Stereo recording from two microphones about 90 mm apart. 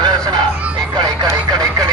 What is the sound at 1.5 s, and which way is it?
Radio, 45° right (ahead or behind).